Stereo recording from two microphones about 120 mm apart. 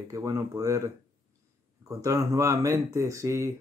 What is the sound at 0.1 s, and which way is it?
Speech, 30° right (ahead or behind).